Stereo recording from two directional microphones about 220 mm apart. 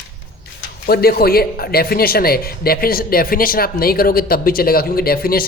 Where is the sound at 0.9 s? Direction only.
45° left (ahead or behind).